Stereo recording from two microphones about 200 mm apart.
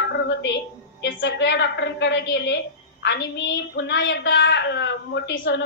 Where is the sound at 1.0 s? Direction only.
65° left (ahead or behind).